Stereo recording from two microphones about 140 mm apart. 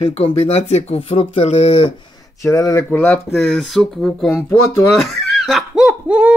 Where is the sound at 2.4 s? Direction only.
20° left (ahead or behind).